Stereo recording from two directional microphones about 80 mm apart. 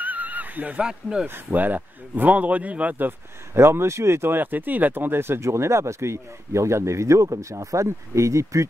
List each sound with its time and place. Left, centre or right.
0.0 s neigh: centre
1.2 s a man's voice: right